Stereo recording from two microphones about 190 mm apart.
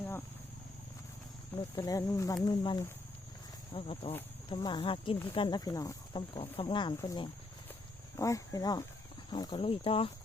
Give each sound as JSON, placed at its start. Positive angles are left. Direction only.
{"t": 1.5, "sound": "speech", "side_deg": 20}